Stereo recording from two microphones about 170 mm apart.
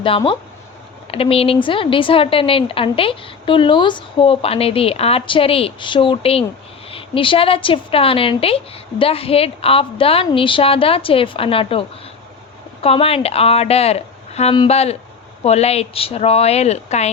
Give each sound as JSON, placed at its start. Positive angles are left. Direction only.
{"t": 1.1, "sound": "speech", "side_deg": 35}